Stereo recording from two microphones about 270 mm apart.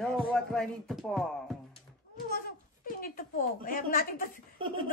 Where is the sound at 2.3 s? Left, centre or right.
Left.